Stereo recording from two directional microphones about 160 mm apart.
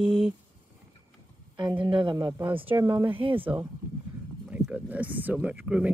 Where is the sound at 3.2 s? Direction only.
35° right (ahead or behind).